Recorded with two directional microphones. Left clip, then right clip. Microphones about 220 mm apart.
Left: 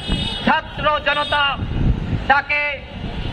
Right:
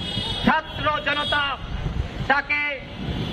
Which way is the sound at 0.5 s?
40° left (ahead or behind).